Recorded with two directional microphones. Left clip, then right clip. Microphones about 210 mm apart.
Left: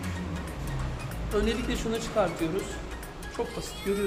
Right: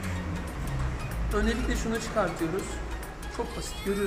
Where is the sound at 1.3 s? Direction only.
20° left (ahead or behind).